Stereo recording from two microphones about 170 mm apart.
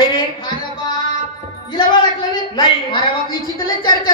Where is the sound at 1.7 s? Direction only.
25° left (ahead or behind).